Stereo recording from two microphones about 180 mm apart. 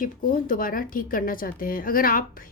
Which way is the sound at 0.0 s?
50° left (ahead or behind).